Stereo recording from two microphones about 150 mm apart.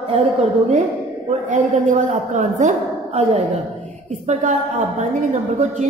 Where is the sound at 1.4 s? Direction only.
55° right (ahead or behind).